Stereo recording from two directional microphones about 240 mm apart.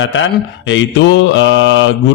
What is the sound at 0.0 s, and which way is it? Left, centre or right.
Mantra, left.